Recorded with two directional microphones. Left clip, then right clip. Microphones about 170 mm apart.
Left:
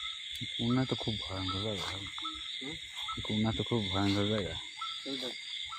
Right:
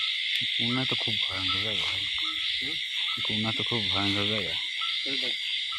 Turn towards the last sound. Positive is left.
turn(degrees=5)  # may be behind; listen again after turning